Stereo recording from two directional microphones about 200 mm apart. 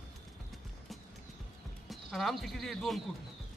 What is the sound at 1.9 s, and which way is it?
Speech, centre (ahead or behind).